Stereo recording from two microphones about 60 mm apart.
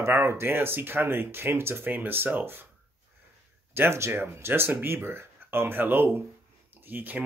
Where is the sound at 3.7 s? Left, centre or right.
Right.